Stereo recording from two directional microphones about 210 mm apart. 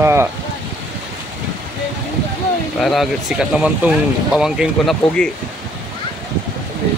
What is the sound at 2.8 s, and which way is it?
Speech, centre (ahead or behind).